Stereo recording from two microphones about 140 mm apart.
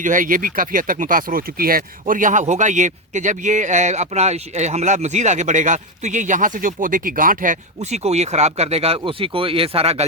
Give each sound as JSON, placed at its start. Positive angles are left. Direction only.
{"t": 0.0, "sound": "speech", "side_deg": -70}